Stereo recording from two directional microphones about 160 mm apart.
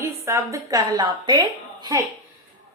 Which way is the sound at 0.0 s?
15° right (ahead or behind).